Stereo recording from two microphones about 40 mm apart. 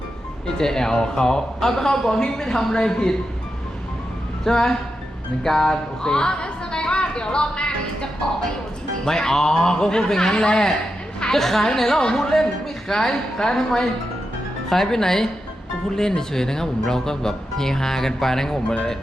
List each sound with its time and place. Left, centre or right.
0.6 s speech: centre
4.4 s a woman's voice: centre
9.0 s speech: centre
18.7 s speech: left